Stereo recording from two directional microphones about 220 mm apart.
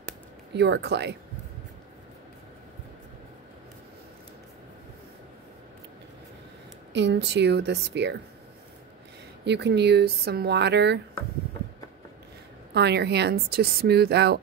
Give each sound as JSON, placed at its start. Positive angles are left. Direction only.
{"t": 0.6, "sound": "speech", "side_deg": -50}
{"t": 6.9, "sound": "speech", "side_deg": -55}
{"t": 9.4, "sound": "speech", "side_deg": -50}
{"t": 12.7, "sound": "speech", "side_deg": -50}